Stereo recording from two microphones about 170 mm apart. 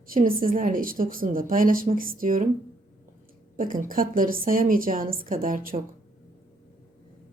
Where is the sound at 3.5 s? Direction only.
50° right (ahead or behind).